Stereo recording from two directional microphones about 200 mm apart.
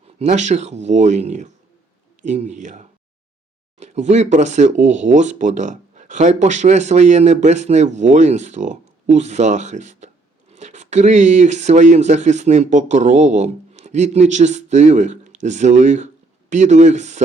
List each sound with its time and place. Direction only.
0.2 s speech: 35° right (ahead or behind)